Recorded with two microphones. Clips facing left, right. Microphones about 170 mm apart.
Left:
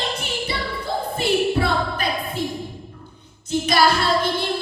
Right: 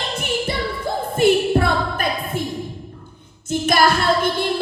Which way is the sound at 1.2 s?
50° right (ahead or behind).